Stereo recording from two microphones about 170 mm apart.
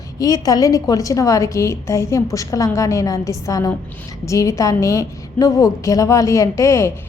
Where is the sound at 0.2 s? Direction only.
20° left (ahead or behind).